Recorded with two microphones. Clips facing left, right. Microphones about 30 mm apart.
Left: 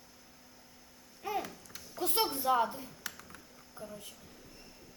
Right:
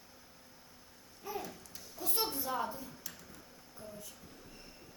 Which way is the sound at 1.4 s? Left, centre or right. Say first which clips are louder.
Left 1 dB; left.